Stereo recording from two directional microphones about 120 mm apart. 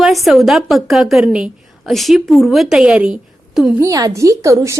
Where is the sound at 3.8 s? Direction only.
30° right (ahead or behind).